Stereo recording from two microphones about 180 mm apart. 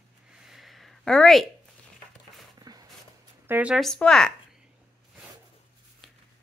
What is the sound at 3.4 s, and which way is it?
Speech, 10° right (ahead or behind).